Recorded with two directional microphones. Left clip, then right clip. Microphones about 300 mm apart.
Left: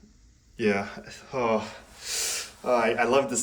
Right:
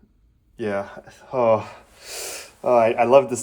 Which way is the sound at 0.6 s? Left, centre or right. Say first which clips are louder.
Even; centre.